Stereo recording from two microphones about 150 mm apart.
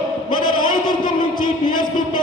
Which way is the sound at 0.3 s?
35° left (ahead or behind).